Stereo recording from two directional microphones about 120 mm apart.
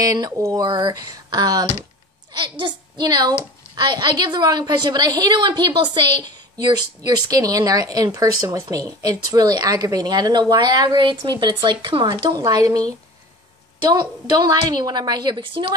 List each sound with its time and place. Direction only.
0.0 s a woman's voice: 30° right (ahead or behind); by 15.7 s 45° right (ahead or behind)